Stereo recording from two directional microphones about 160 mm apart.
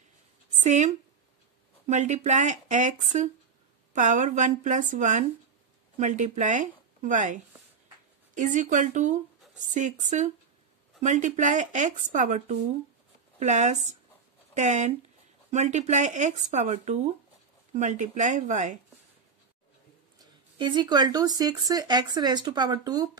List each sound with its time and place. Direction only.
0.7 s speech: 45° right (ahead or behind)
8.4 s speech: 50° right (ahead or behind)
20.2 s speech: 30° right (ahead or behind)